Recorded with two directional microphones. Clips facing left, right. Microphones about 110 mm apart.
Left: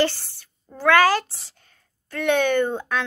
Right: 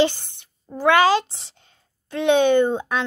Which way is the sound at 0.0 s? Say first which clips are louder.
Right 3 dB; 20° right (ahead or behind).